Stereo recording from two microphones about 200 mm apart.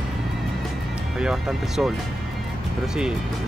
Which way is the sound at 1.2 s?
Centre (ahead or behind).